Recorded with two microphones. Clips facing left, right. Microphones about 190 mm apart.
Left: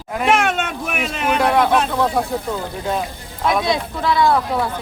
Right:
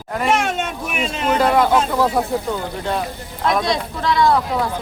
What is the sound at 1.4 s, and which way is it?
Speech, centre (ahead or behind).